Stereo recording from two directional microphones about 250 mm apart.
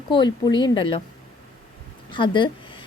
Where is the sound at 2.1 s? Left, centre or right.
Centre.